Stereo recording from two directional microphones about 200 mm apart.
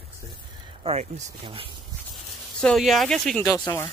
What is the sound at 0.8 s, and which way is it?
Speech, 30° right (ahead or behind).